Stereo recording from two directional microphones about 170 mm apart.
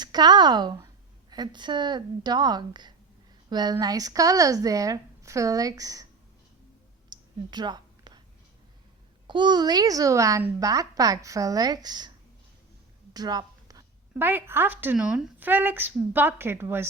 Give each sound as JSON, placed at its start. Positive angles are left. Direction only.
{"t": 0.0, "sound": "a child's voice", "side_deg": -25}
{"t": 7.1, "sound": "a sound", "side_deg": -25}
{"t": 9.2, "sound": "a child's voice", "side_deg": -25}
{"t": 13.1, "sound": "a woman's voice", "side_deg": -20}